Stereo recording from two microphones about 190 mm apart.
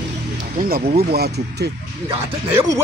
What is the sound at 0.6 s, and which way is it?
Speech, 50° right (ahead or behind).